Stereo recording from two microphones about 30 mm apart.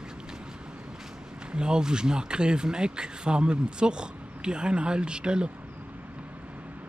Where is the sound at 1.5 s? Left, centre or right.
Right.